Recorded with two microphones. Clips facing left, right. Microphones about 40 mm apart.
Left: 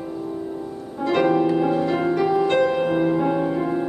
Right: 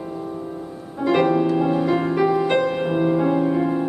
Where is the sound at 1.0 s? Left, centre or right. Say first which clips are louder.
Right 1 dB; centre.